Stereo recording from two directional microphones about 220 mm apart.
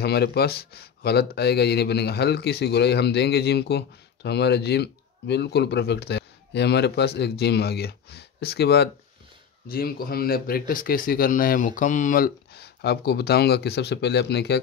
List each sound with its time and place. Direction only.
0.0 s speech: 45° left (ahead or behind)